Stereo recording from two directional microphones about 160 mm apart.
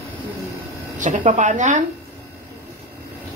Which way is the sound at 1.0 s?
55° right (ahead or behind).